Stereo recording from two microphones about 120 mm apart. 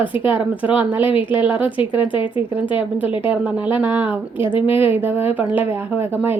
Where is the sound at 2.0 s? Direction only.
45° left (ahead or behind).